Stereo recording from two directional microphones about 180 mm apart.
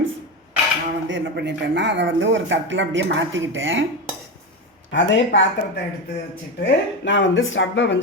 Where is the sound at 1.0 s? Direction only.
80° right.